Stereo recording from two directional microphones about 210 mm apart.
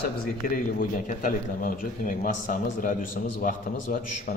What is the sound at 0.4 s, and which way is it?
A man's voice, 40° left (ahead or behind).